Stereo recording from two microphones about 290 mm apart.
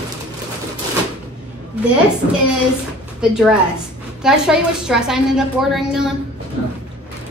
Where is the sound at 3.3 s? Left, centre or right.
Centre.